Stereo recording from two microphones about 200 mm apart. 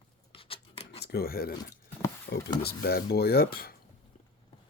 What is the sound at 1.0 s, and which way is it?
Speech, 50° left (ahead or behind).